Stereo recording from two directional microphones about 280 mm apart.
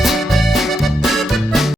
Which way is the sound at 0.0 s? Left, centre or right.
Centre.